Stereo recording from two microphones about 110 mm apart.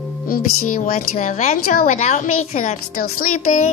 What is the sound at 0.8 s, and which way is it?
A woman's voice, 90° left.